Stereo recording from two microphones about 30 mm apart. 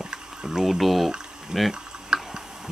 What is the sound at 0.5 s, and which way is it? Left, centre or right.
Speech, centre.